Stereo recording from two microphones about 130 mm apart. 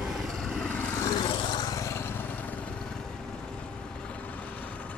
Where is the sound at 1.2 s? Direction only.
40° left (ahead or behind).